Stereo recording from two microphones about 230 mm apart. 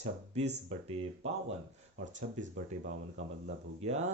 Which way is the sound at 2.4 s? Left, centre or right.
Right.